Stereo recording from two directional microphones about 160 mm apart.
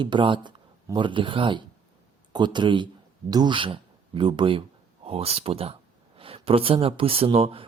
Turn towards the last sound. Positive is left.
turn(degrees=-35)  # may be behind; listen again after turning